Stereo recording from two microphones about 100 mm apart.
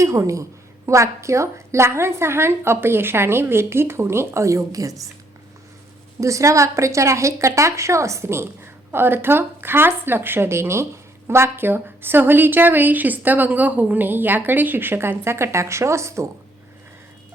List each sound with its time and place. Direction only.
0.0 s a woman's voice: 30° right (ahead or behind)
6.1 s a woman's voice: 30° right (ahead or behind)